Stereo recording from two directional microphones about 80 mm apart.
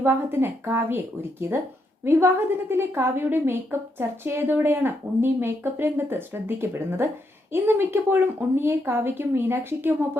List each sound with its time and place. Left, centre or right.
0.0 s a woman's voice: right